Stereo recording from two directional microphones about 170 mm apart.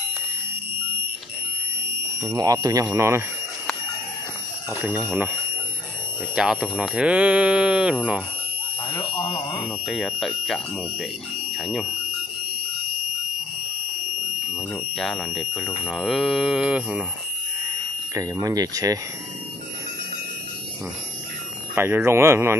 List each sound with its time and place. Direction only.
2.2 s speech: 20° right (ahead or behind)
4.6 s speech: 10° right (ahead or behind)
6.3 s speech: 5° right (ahead or behind)
9.1 s speech: 35° left (ahead or behind)
9.8 s speech: centre (ahead or behind)
14.5 s speech: centre (ahead or behind)
18.1 s speech: 20° right (ahead or behind)
21.7 s speech: 15° right (ahead or behind)